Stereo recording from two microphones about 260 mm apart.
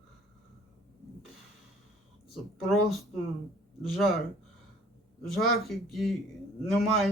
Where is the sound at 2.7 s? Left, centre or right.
Centre.